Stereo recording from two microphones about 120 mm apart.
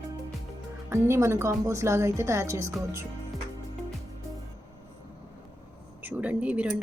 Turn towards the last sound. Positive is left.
turn(degrees=-10)  # may be behind; listen again after turning